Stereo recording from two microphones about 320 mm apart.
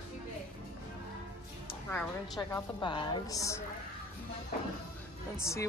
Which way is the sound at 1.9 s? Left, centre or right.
Centre.